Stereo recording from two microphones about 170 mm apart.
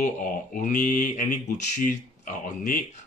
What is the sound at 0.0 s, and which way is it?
Speech, 50° left (ahead or behind).